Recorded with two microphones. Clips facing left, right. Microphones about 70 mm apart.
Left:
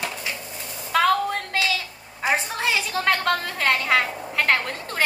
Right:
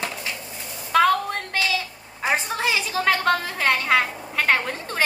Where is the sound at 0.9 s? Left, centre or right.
Centre.